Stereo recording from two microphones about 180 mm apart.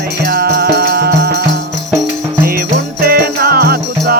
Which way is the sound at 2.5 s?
55° right (ahead or behind).